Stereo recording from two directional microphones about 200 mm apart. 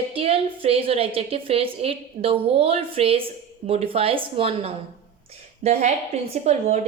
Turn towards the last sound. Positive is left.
turn(degrees=-35)  # may be behind; listen again after turning